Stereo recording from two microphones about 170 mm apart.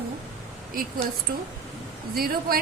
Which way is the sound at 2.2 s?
60° right (ahead or behind).